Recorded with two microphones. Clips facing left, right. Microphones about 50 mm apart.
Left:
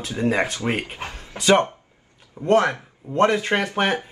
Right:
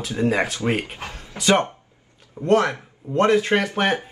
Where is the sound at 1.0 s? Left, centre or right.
Left.